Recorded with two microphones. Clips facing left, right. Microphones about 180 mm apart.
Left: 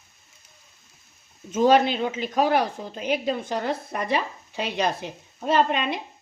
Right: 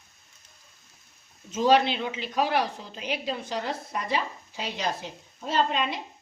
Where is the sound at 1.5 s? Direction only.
50° left (ahead or behind).